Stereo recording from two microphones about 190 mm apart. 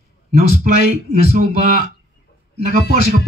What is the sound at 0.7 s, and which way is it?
Speech, 40° right (ahead or behind).